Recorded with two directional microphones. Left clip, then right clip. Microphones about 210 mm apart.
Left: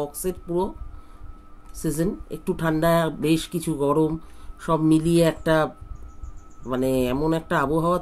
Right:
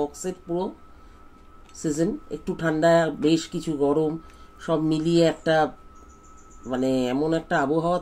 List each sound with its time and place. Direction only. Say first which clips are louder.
0.2 s speech: left 3 dB; 55° left (ahead or behind)
1.8 s speech: right 1 dB; 55° left (ahead or behind)
6.7 s speech: left 1 dB; 55° left (ahead or behind)